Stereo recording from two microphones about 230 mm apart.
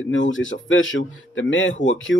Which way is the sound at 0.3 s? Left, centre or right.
Left.